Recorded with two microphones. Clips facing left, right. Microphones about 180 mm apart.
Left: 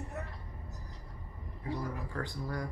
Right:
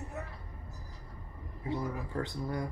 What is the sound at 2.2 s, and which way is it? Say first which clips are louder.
Speech: right 2 dB; 20° right (ahead or behind).